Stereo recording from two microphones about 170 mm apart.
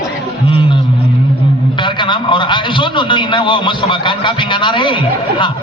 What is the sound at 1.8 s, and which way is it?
A man's voice, 30° left (ahead or behind).